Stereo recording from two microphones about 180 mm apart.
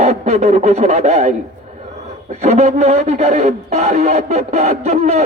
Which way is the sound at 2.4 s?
40° right (ahead or behind).